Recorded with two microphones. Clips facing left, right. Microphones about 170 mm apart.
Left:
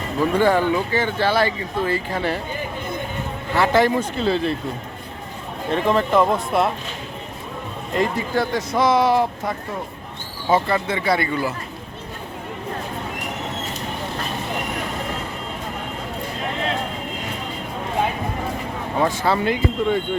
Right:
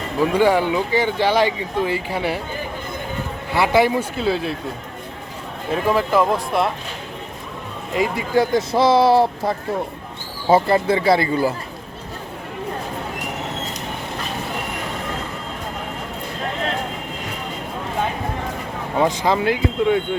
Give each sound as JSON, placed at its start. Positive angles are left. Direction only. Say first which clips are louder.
{"t": 0.2, "sound": "speech", "louder": "right 1 dB", "side_deg": -10}
{"t": 3.5, "sound": "speech", "louder": "right 1 dB", "side_deg": -10}
{"t": 5.7, "sound": "speech", "louder": "even", "side_deg": -5}
{"t": 7.9, "sound": "speech", "louder": "even", "side_deg": -5}
{"t": 8.4, "sound": "speech", "louder": "right 4 dB", "side_deg": -30}
{"t": 18.9, "sound": "speech", "louder": "right 2 dB", "side_deg": -15}